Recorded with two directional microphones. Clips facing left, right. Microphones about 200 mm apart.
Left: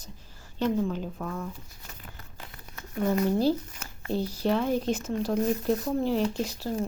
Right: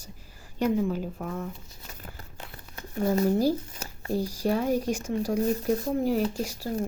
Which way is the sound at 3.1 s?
35° right (ahead or behind).